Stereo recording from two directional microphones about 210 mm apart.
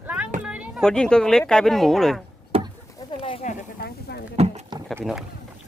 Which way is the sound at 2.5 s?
25° right (ahead or behind).